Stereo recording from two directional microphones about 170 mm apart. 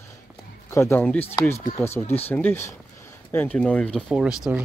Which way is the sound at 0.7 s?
15° left (ahead or behind).